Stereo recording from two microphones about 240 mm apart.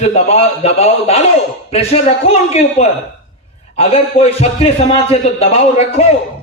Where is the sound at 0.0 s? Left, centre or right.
Left.